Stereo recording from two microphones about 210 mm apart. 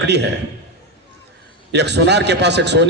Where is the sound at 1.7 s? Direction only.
55° right (ahead or behind).